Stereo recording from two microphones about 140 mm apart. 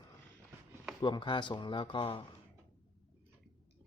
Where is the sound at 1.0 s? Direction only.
35° left (ahead or behind).